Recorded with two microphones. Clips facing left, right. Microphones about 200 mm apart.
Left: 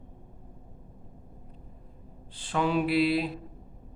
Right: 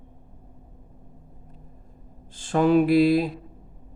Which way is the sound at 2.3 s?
45° right (ahead or behind).